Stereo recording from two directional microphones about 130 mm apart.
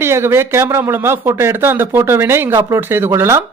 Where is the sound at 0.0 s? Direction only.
20° right (ahead or behind).